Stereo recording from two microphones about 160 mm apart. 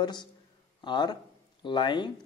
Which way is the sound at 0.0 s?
30° left (ahead or behind).